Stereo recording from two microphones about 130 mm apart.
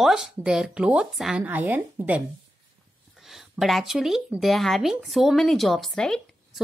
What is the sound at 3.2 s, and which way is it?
Speech, centre (ahead or behind).